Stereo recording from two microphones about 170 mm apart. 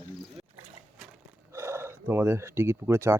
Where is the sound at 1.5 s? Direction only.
15° right (ahead or behind).